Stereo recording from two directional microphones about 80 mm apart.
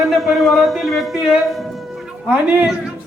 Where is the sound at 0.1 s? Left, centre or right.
Centre.